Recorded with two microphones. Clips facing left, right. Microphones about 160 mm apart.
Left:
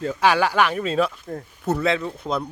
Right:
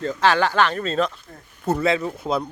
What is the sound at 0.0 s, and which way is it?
Speech, 10° left (ahead or behind).